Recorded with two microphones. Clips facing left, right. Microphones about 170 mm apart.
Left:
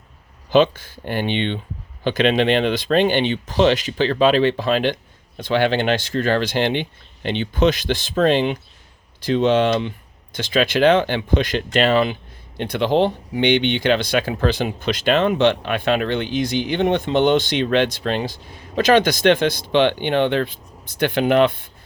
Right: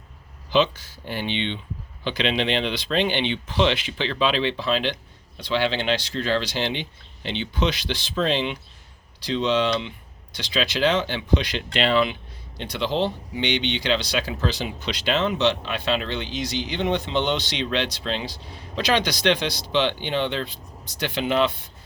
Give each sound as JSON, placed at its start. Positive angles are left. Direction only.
{"t": 0.5, "sound": "speech", "side_deg": 50}